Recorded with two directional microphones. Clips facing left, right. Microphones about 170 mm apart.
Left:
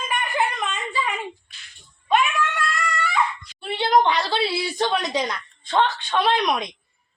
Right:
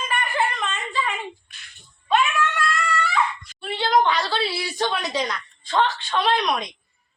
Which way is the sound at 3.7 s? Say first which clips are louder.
Left 1 dB; 20° left (ahead or behind).